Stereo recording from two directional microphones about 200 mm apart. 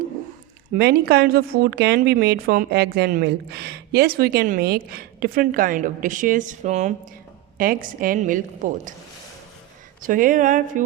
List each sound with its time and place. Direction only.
0.7 s a woman's voice: 55° right (ahead or behind)
10.0 s a woman's voice: 40° right (ahead or behind)